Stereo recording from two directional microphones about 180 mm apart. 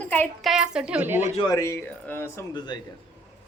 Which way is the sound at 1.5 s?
15° left (ahead or behind).